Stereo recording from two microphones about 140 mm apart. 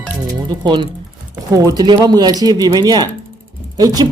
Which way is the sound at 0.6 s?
35° right (ahead or behind).